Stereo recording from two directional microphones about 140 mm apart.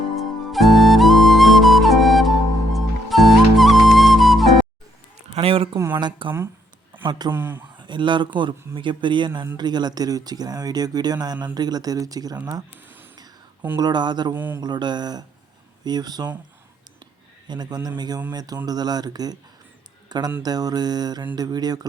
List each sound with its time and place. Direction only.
0.2 s music: centre (ahead or behind)
5.3 s a sound: 45° right (ahead or behind)
5.9 s speech: 35° right (ahead or behind)
7.3 s speech: 15° right (ahead or behind)
7.8 s speech: 35° right (ahead or behind)
13.7 s speech: 30° right (ahead or behind)
14.3 s speech: 15° right (ahead or behind)
14.6 s speech: 30° right (ahead or behind)
17.5 s speech: 30° right (ahead or behind)